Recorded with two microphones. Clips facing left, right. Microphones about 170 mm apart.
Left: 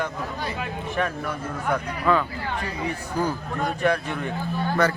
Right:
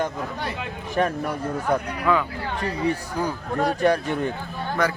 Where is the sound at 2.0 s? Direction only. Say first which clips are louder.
Left 2 dB; 10° right (ahead or behind).